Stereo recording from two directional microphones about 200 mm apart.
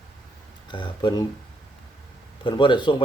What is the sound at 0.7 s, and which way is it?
Speech, 25° left (ahead or behind).